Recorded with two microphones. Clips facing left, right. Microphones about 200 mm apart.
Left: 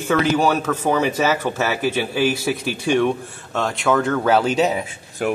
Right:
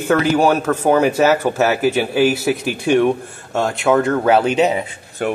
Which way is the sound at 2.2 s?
50° right (ahead or behind).